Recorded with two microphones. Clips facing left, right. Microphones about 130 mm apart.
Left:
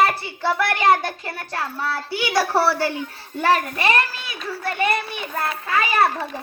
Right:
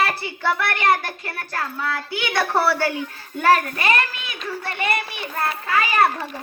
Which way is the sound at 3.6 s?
25° left (ahead or behind).